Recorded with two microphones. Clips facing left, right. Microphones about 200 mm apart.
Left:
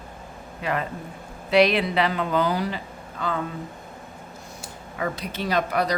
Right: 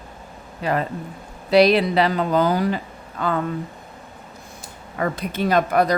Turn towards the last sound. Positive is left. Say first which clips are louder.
# right 5 dB
turn(degrees=-50)  # may be behind; listen again after turning